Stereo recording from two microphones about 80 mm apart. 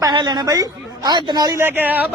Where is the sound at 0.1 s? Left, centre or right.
Right.